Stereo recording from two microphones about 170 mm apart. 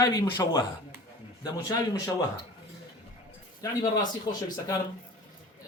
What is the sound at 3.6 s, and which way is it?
Speech, 20° left (ahead or behind).